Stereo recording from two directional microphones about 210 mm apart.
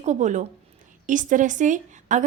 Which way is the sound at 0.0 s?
35° right (ahead or behind).